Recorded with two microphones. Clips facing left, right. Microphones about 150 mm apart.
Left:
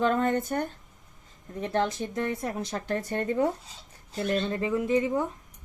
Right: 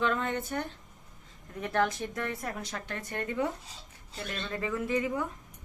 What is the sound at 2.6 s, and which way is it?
A woman's voice, 35° left (ahead or behind).